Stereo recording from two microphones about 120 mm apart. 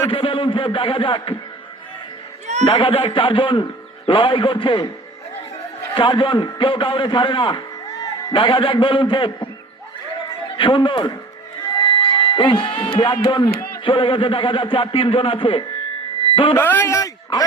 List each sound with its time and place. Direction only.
0.1 s speech: 45° left (ahead or behind)
2.6 s speech: 50° left (ahead or behind)
5.9 s a man's voice: 40° left (ahead or behind)
10.6 s speech: 45° left (ahead or behind)
11.8 s a sound: 45° left (ahead or behind)
13.2 s a man's voice: 40° left (ahead or behind)
16.6 s speech: 15° left (ahead or behind)